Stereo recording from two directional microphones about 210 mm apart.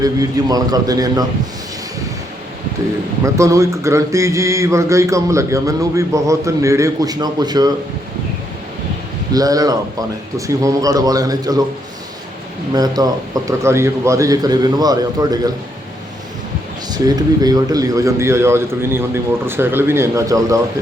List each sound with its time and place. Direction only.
0.0 s a man's voice: 15° right (ahead or behind)
3.2 s a man's voice: 15° right (ahead or behind)
9.3 s a man's voice: 15° right (ahead or behind)
12.7 s a man's voice: 20° right (ahead or behind)
16.9 s a man's voice: 20° right (ahead or behind)